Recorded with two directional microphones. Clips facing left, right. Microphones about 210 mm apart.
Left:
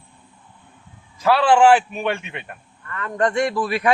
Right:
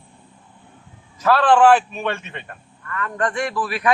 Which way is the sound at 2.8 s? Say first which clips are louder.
Left 2 dB; 25° left (ahead or behind).